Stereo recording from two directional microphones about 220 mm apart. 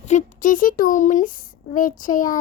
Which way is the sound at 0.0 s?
35° left (ahead or behind).